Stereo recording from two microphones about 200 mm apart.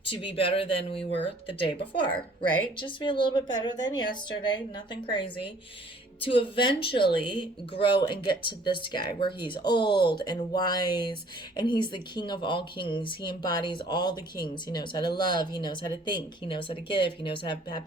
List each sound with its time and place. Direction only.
0.0 s speech: 25° left (ahead or behind)
2.7 s speech: 25° left (ahead or behind)